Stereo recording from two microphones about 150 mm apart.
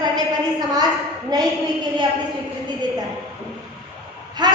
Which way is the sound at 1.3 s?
25° right (ahead or behind).